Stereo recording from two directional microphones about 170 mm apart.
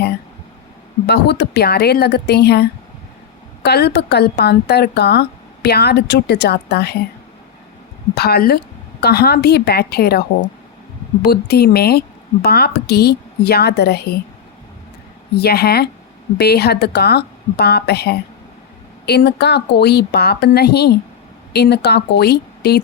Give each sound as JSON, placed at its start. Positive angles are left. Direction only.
{"t": 1.0, "sound": "a woman's voice", "side_deg": 75}
{"t": 8.1, "sound": "a woman's voice", "side_deg": 70}
{"t": 15.4, "sound": "a woman's voice", "side_deg": 70}